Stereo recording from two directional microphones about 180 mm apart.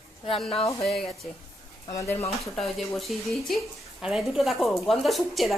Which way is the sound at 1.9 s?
15° left (ahead or behind).